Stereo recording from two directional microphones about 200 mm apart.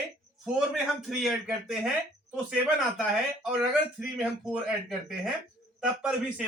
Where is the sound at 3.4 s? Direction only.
5° right (ahead or behind).